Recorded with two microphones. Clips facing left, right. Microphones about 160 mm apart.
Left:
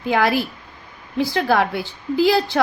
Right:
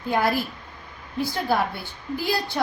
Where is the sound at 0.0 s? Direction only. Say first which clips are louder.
Left 4 dB; 90° left.